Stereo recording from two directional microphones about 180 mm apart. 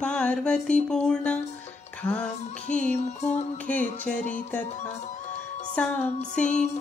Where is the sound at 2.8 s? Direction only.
40° left (ahead or behind).